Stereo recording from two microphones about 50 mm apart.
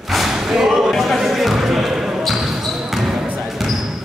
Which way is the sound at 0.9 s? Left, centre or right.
Centre.